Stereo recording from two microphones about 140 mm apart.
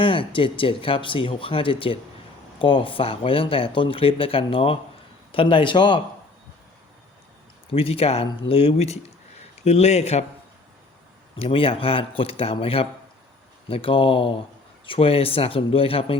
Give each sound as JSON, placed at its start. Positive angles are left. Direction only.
{"t": 0.0, "sound": "speech", "side_deg": 40}
{"t": 7.7, "sound": "a man's voice", "side_deg": 40}
{"t": 11.3, "sound": "speech", "side_deg": 40}